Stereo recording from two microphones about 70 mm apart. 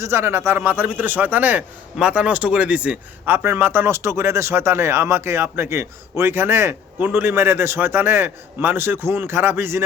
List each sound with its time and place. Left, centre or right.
0.0 s a man's voice: right; by 3.0 s centre
3.2 s speech: right